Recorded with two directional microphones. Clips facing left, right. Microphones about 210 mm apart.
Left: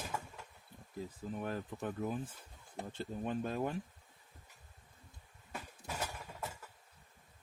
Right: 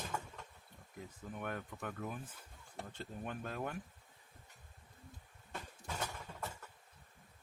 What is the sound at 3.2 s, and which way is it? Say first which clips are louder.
Speech: left 6 dB; 25° left (ahead or behind).